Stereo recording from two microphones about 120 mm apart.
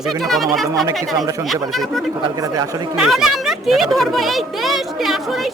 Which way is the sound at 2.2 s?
30° right (ahead or behind).